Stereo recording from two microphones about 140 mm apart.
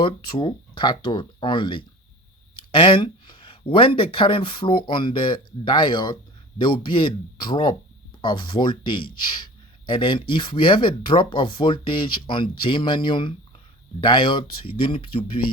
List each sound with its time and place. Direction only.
0.0 s speech: 35° left (ahead or behind)